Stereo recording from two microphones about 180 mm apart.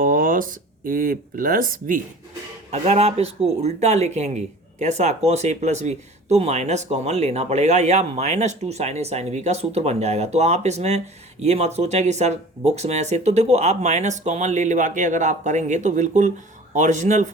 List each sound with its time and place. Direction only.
0.0 s a sound: 50° right (ahead or behind)
0.9 s speech: 50° right (ahead or behind)
2.7 s speech: 40° right (ahead or behind)